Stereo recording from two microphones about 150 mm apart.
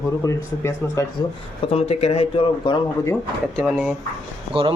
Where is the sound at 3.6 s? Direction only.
10° right (ahead or behind).